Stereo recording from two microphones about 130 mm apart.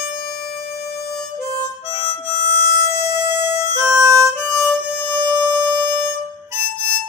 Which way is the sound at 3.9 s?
25° right (ahead or behind).